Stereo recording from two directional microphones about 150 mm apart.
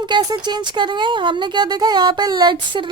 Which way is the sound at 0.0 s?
30° right (ahead or behind).